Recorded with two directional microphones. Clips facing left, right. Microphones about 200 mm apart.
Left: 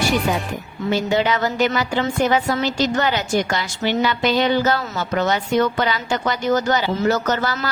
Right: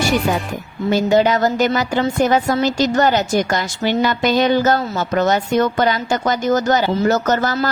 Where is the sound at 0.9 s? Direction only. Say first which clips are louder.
Right 5 dB; 45° right (ahead or behind).